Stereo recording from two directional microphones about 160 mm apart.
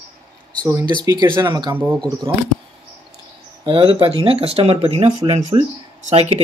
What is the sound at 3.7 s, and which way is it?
Speech, 30° right (ahead or behind).